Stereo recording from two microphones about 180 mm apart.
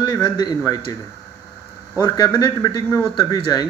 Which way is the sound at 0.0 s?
20° left (ahead or behind).